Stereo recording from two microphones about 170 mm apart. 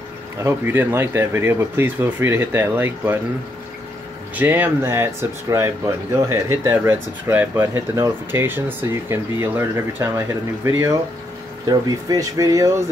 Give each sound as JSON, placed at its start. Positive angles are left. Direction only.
{"t": 0.4, "sound": "speech", "side_deg": -15}
{"t": 4.4, "sound": "speech", "side_deg": -10}